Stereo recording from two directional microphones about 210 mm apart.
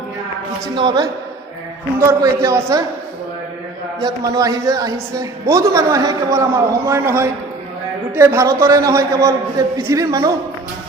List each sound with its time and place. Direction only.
0.8 s a man's voice: 20° right (ahead or behind)
4.0 s a woman's voice: 20° right (ahead or behind)